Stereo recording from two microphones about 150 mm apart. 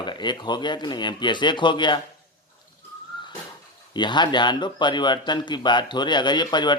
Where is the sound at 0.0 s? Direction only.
30° left (ahead or behind).